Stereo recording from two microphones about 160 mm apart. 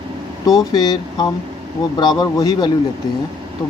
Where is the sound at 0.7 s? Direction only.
25° left (ahead or behind).